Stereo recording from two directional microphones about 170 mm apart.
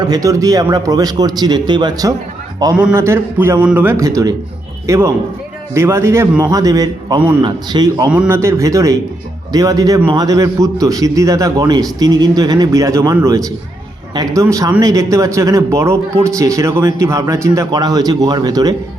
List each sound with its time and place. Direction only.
0.0 s speech: 20° right (ahead or behind)
2.7 s a man's voice: 10° right (ahead or behind)
8.1 s a man's voice: 10° right (ahead or behind)